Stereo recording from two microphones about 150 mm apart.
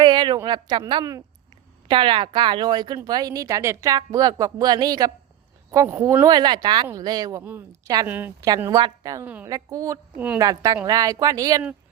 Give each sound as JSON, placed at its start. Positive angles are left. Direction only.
{"t": 0.0, "sound": "a sound", "side_deg": -30}
{"t": 0.4, "sound": "speech", "side_deg": -30}
{"t": 8.0, "sound": "a woman's voice", "side_deg": -10}
{"t": 8.4, "sound": "speech", "side_deg": -25}
{"t": 9.2, "sound": "a woman's voice", "side_deg": -10}
{"t": 9.5, "sound": "speech", "side_deg": -25}